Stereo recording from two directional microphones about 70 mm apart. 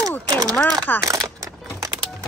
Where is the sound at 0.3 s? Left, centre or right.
Right.